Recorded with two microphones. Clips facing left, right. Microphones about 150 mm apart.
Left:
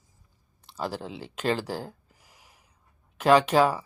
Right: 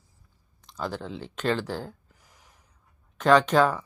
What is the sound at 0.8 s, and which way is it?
Speech, 35° left (ahead or behind).